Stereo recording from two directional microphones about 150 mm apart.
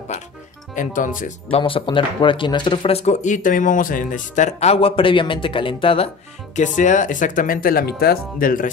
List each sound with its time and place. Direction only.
0.7 s speech: 60° left (ahead or behind)
1.5 s speech: 35° left (ahead or behind)
6.5 s speech: 55° left (ahead or behind)